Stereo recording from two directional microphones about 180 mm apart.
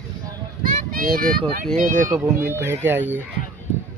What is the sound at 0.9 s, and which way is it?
Speech, 50° right (ahead or behind).